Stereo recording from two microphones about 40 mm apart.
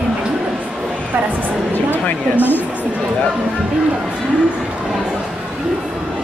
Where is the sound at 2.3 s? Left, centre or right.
Left.